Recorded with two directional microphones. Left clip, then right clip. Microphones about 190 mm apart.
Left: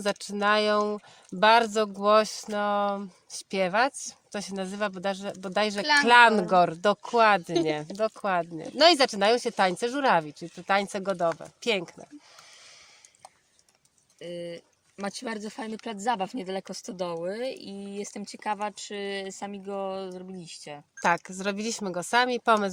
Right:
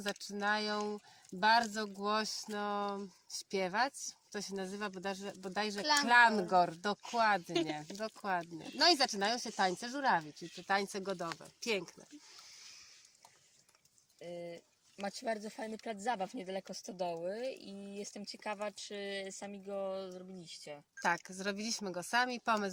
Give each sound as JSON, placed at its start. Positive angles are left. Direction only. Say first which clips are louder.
{"t": 0.0, "sound": "speech", "louder": "left 11 dB", "side_deg": 50}
{"t": 14.2, "sound": "speech", "louder": "left 9 dB", "side_deg": 20}
{"t": 21.0, "sound": "speech", "louder": "left 9 dB", "side_deg": 45}